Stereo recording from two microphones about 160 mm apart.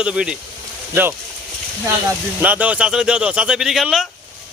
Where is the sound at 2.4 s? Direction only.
10° right (ahead or behind).